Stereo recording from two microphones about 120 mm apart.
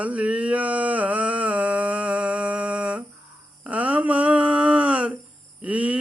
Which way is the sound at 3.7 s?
10° right (ahead or behind).